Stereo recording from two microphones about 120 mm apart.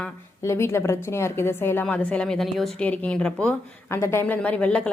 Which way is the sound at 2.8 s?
10° left (ahead or behind).